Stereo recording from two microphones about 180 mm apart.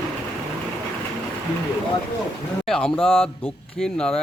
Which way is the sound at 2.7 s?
5° left (ahead or behind).